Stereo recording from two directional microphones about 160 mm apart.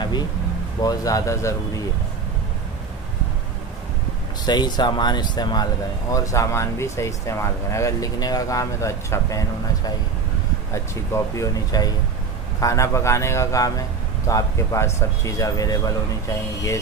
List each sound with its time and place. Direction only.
0.8 s speech: 20° left (ahead or behind)
4.5 s speech: 25° left (ahead or behind)